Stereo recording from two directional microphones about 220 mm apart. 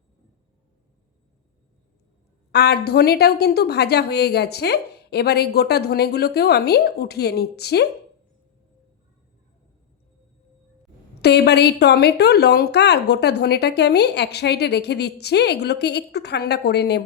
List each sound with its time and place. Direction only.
2.5 s a woman's voice: 50° left (ahead or behind)
11.2 s a woman's voice: 50° left (ahead or behind)